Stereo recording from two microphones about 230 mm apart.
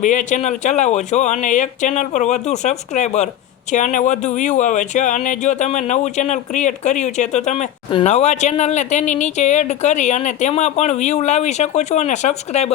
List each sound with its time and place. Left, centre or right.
0.0 s speech: left